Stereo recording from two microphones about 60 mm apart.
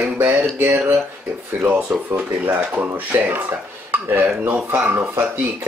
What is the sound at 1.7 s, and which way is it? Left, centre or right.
Speech, right.